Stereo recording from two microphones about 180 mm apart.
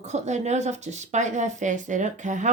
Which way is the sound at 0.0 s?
40° right (ahead or behind).